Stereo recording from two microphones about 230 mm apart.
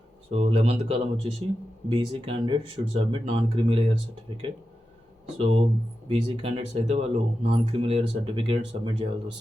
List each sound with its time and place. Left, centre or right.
0.3 s speech: right
5.4 s speech: right